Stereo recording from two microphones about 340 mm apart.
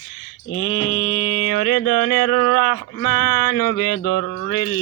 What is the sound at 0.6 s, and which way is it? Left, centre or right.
Mantra, left.